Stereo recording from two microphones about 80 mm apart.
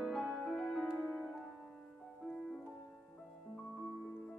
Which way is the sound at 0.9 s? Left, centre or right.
Left.